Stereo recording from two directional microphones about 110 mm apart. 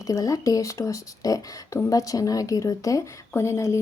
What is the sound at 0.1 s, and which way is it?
A woman's voice, 30° left (ahead or behind).